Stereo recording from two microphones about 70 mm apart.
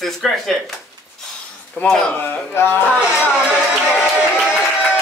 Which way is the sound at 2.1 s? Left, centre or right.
Left.